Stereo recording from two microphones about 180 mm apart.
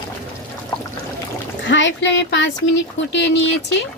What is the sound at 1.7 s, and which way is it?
Speech, 85° left.